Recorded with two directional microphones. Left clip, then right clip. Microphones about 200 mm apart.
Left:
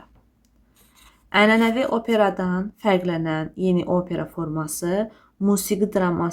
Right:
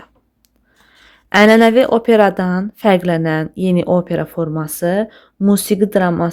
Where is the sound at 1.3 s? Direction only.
45° right (ahead or behind).